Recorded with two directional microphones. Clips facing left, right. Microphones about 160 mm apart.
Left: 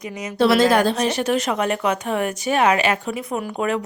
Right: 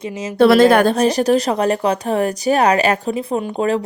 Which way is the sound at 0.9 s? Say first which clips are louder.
Right 6 dB; 35° right (ahead or behind).